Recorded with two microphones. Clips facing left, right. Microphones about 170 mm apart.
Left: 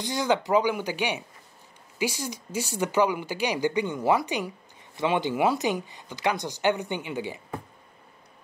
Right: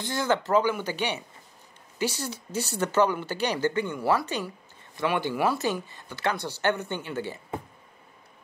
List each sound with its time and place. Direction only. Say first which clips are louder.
0.0 s a woman's voice: left 1 dB; 15° left (ahead or behind)